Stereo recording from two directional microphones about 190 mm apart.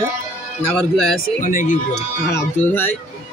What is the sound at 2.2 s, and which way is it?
Speech, 10° left (ahead or behind).